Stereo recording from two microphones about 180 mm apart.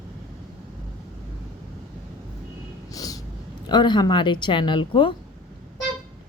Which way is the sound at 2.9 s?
20° left (ahead or behind).